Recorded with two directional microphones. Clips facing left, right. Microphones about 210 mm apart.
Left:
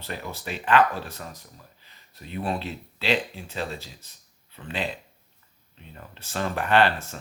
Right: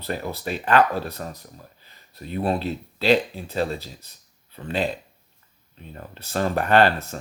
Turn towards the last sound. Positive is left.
turn(degrees=-40)  # may be behind; listen again after turning